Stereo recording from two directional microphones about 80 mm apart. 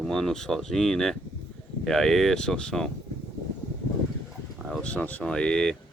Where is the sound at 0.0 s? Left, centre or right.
Centre.